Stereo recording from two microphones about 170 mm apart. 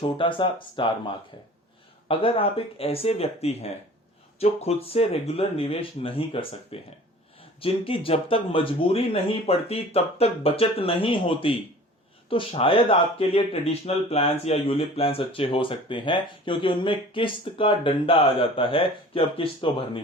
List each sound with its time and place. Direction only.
0.0 s speech: 30° left (ahead or behind)